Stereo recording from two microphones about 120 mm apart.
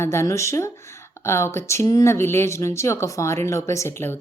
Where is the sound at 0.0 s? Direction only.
20° left (ahead or behind).